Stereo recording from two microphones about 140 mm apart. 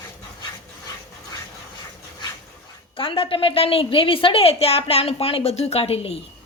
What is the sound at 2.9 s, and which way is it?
A woman's voice, 40° left (ahead or behind).